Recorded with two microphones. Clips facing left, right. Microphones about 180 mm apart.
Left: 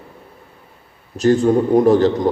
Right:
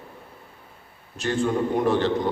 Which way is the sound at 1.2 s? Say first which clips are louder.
Left 10 dB; 40° left (ahead or behind).